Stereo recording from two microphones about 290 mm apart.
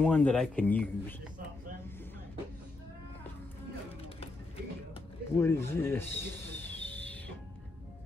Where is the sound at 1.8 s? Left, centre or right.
Centre.